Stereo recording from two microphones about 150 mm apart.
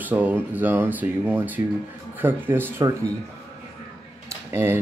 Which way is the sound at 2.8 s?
25° right (ahead or behind).